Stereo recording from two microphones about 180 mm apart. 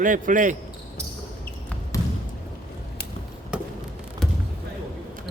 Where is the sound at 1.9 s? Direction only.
20° left (ahead or behind).